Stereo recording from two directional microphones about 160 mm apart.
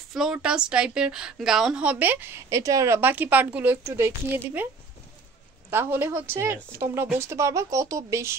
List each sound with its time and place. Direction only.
0.1 s a woman's voice: 5° right (ahead or behind)
5.7 s a woman's voice: 15° right (ahead or behind)